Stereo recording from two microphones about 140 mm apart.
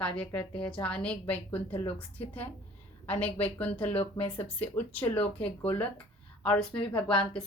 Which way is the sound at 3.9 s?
40° left (ahead or behind).